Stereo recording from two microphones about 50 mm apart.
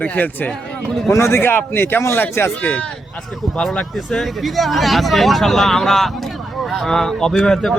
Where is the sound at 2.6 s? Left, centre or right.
Left.